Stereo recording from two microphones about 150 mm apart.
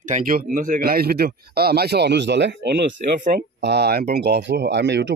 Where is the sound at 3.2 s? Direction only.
80° right.